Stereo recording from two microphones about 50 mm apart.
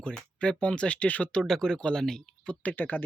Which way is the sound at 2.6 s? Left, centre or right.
Left.